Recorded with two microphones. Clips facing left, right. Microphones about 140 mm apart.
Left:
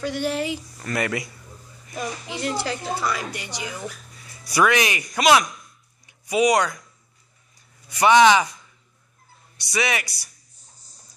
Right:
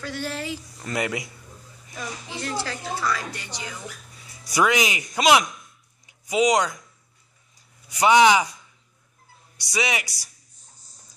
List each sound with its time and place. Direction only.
0.0 s a woman's voice: 20° left (ahead or behind)
0.7 s speech: 15° right (ahead or behind)
2.0 s a woman's voice: 15° left (ahead or behind)
4.5 s speech: 15° right (ahead or behind)
7.9 s speech: 15° right (ahead or behind)
9.6 s speech: 15° right (ahead or behind)